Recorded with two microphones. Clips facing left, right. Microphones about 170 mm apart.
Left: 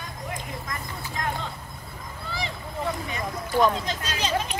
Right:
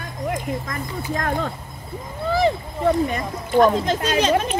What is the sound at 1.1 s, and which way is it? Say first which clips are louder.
Speech: right 7 dB; 55° right (ahead or behind).